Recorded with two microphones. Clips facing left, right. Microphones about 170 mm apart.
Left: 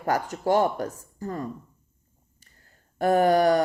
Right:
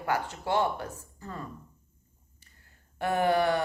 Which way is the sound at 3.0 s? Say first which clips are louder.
Left 6 dB; 40° left (ahead or behind).